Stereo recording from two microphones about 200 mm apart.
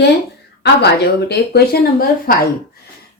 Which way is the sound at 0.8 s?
55° left (ahead or behind).